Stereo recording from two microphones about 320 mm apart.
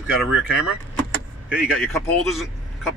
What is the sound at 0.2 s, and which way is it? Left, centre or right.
Speech, centre.